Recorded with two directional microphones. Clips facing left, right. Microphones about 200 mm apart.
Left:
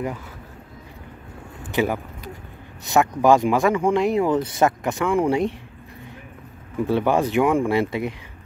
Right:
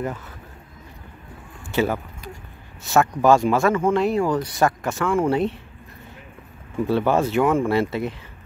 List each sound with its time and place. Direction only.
1.6 s a sound: 15° left (ahead or behind)
2.8 s speech: 15° left (ahead or behind)
6.9 s speech: 15° left (ahead or behind)